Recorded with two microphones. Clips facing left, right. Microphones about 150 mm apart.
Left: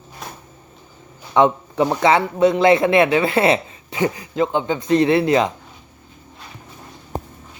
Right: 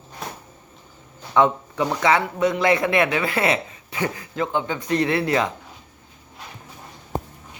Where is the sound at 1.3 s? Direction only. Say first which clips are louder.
Left 3 dB; 25° left (ahead or behind).